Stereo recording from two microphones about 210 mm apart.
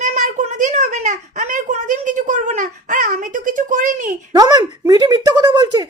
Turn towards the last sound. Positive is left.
turn(degrees=-20)  # may be behind; listen again after turning